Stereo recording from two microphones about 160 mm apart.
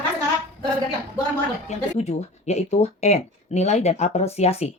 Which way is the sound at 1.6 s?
45° left (ahead or behind).